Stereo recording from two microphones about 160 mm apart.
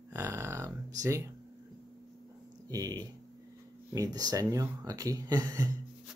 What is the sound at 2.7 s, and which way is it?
Speech, 25° right (ahead or behind).